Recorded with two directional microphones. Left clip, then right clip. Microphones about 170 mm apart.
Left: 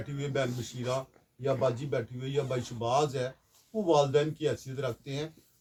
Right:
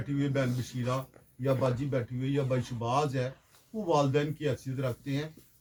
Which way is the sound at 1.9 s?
15° left (ahead or behind).